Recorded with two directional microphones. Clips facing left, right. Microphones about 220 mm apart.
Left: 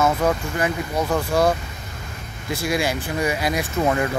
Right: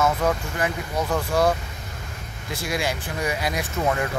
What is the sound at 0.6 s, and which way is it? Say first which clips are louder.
Speech: left 3 dB; 5° left (ahead or behind).